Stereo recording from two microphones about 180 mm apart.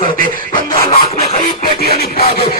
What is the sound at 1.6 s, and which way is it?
Music, 60° left (ahead or behind).